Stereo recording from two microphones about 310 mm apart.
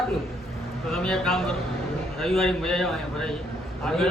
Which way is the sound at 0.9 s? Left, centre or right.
Centre.